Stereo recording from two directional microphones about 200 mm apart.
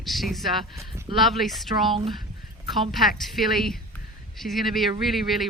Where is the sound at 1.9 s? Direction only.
25° right (ahead or behind).